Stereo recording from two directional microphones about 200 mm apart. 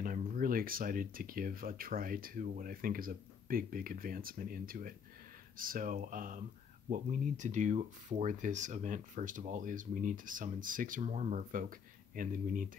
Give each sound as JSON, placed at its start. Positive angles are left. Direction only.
{"t": 0.0, "sound": "speech", "side_deg": -45}